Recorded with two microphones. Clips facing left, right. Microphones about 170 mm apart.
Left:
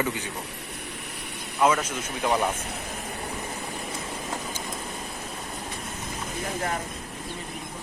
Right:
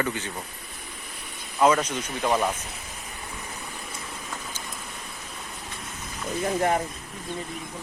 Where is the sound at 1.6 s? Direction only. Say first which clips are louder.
Right 2 dB; 5° left (ahead or behind).